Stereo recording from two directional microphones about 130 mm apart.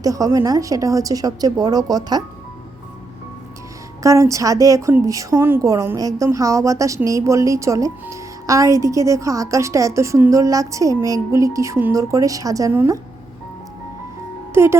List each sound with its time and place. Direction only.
0.0 s a woman's voice: 25° right (ahead or behind)
4.0 s a woman's voice: 25° right (ahead or behind)
14.5 s speech: 20° right (ahead or behind)